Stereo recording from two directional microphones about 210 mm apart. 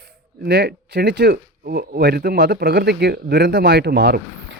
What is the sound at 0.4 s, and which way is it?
Speech, 50° right (ahead or behind).